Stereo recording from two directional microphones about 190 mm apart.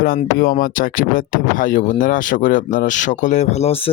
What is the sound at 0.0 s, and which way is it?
Speech, 50° left (ahead or behind).